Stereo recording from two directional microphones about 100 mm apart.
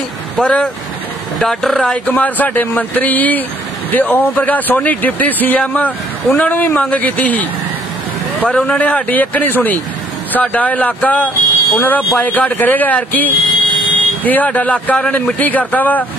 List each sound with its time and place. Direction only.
0.4 s speech: 10° left (ahead or behind)